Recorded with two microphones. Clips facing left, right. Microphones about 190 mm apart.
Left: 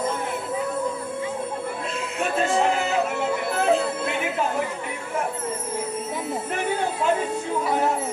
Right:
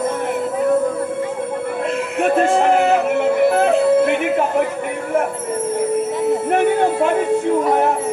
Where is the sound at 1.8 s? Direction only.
60° right (ahead or behind).